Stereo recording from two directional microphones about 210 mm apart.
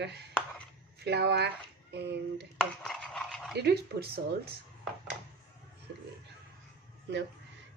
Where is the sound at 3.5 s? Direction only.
50° right (ahead or behind).